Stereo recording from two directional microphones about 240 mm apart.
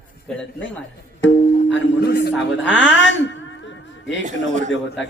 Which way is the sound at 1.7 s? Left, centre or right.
Left.